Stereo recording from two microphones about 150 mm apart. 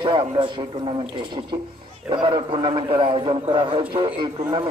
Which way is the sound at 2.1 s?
30° right (ahead or behind).